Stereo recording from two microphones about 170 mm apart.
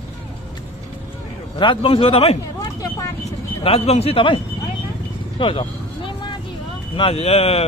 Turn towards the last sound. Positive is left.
turn(degrees=35)  # may be behind; listen again after turning